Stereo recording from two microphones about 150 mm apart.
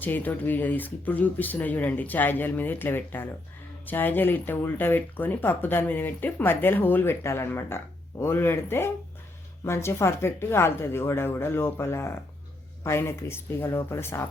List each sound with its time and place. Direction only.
0.0 s speech: 10° left (ahead or behind)